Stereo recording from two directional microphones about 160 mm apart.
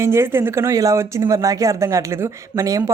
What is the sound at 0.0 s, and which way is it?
Speech, 15° right (ahead or behind).